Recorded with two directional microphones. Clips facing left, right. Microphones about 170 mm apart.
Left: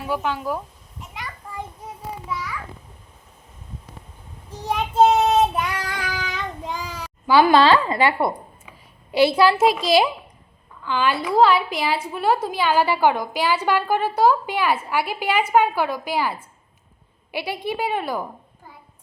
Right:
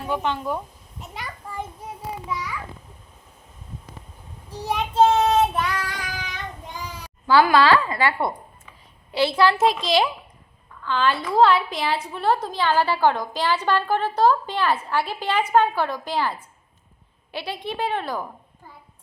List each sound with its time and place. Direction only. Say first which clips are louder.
0.0 s speech: even; 5° left (ahead or behind)
4.6 s speech: left 1 dB; centre (ahead or behind)
5.0 s child singing: left 2 dB; 10° left (ahead or behind)
5.9 s child singing: left 4 dB; 75° left (ahead or behind); by 7.1 s 90° left
7.3 s a woman's voice: left 2 dB; 20° left (ahead or behind)
9.1 s a woman's voice: left 3 dB; 10° left (ahead or behind)